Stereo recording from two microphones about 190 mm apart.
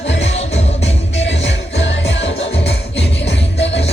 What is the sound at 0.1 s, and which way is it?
Music, 70° left (ahead or behind).